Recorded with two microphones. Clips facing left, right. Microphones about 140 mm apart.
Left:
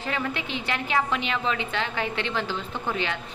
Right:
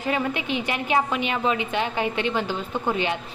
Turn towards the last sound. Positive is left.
turn(degrees=-20)  # may be behind; listen again after turning